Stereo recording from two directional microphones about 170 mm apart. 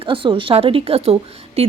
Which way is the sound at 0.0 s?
30° right (ahead or behind).